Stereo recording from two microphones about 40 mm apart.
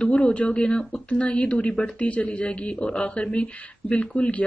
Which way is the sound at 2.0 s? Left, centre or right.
Left.